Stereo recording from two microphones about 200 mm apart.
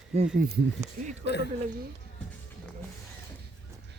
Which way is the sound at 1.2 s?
60° left (ahead or behind).